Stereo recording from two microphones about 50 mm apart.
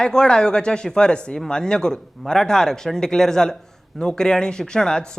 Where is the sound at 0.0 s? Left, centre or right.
Centre.